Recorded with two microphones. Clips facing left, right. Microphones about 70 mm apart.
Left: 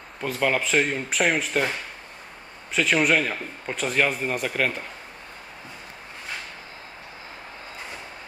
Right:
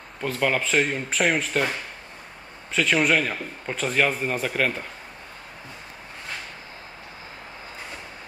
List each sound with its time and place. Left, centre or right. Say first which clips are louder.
0.2 s a man's voice: even; centre